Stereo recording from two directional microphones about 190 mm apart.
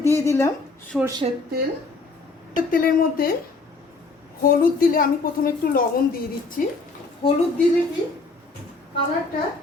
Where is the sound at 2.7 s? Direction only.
50° left (ahead or behind).